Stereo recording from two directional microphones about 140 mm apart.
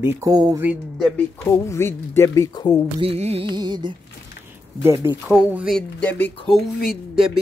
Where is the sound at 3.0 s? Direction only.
45° right (ahead or behind).